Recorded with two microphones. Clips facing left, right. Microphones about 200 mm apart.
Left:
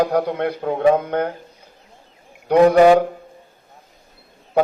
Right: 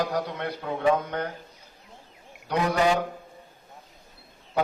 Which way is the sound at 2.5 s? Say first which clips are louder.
Left 12 dB; 55° left (ahead or behind).